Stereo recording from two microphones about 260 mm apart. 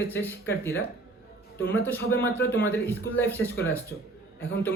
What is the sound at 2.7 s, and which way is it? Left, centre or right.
Speech, centre.